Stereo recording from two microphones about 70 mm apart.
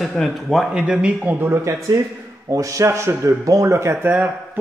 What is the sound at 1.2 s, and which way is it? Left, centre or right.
Speech, right.